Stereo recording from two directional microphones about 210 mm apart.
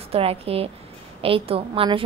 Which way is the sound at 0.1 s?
30° right (ahead or behind).